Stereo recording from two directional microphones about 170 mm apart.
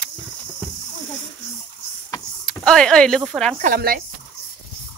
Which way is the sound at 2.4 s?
5° left (ahead or behind).